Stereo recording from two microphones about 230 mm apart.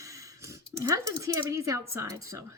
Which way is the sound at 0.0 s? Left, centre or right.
Centre.